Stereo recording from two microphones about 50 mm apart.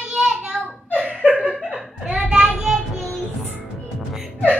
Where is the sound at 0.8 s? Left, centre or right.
Right.